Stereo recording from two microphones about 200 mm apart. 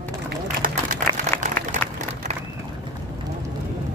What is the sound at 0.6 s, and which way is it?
Applause, 40° right (ahead or behind).